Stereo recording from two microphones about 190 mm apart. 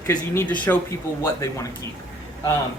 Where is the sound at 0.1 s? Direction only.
10° left (ahead or behind).